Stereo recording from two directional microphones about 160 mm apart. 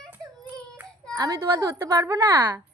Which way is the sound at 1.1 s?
20° right (ahead or behind).